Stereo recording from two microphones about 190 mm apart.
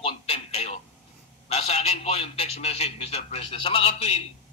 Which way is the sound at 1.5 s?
30° left (ahead or behind).